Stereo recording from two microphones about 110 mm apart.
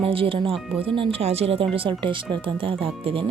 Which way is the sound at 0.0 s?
55° right (ahead or behind).